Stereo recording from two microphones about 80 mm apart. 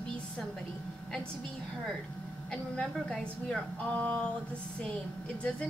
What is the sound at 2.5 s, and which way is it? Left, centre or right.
A woman's voice, centre.